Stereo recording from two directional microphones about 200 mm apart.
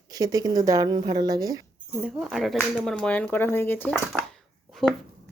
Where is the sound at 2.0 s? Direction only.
Centre (ahead or behind).